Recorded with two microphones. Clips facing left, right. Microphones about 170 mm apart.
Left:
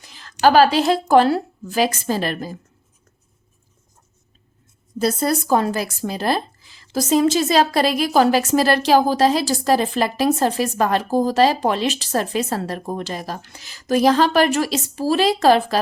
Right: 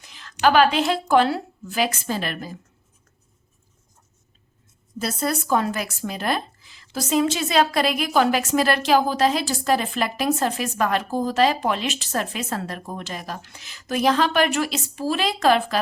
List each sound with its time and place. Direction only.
0.0 s a woman's voice: 35° left (ahead or behind)
4.9 s speech: 35° left (ahead or behind)